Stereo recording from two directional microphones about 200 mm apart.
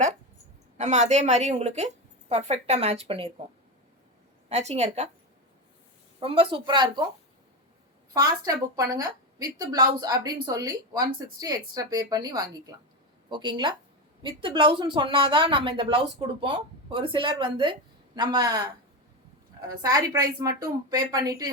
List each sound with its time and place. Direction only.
0.8 s a woman's voice: 35° right (ahead or behind)
4.4 s a woman's voice: 30° right (ahead or behind)
6.1 s speech: 25° right (ahead or behind)
8.1 s speech: 20° right (ahead or behind)